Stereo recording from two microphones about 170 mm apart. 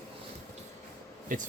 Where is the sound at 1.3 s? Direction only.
50° right (ahead or behind).